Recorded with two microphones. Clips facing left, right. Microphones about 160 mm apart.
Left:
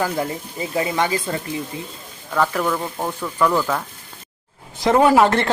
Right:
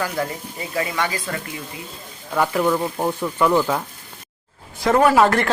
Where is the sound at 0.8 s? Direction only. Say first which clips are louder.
Left 3 dB; 25° left (ahead or behind).